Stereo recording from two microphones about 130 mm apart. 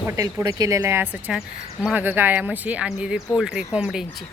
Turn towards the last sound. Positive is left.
turn(degrees=-5)  # may be behind; listen again after turning